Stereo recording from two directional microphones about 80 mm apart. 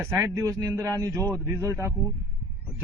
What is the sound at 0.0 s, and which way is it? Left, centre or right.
Speech, right.